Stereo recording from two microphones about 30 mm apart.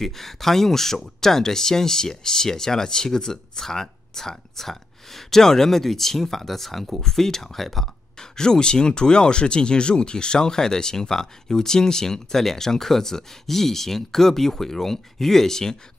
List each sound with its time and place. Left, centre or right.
0.0 s speech: centre
8.2 s speech: left